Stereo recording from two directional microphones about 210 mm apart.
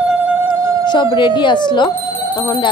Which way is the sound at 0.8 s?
20° left (ahead or behind).